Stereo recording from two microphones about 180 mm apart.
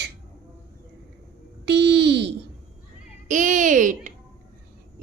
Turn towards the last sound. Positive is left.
turn(degrees=-45)  # may be behind; listen again after turning